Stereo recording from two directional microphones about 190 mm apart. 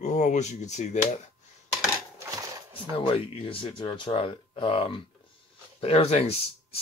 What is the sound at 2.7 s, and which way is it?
Speech, 30° left (ahead or behind).